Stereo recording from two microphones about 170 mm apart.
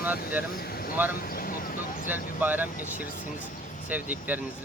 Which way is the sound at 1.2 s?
60° left (ahead or behind).